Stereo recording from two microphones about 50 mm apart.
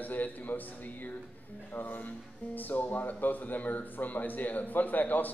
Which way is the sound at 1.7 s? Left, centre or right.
Left.